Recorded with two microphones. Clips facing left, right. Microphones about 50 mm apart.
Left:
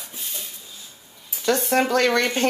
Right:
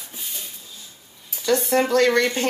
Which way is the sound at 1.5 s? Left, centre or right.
Left.